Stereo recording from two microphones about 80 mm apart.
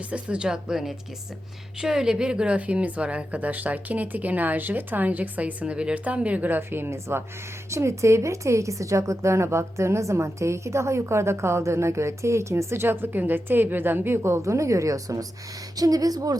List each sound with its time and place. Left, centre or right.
0.1 s a woman's voice: centre; by 16.4 s right